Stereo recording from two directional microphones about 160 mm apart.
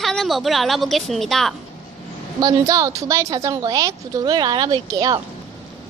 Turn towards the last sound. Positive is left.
turn(degrees=-25)  # may be behind; listen again after turning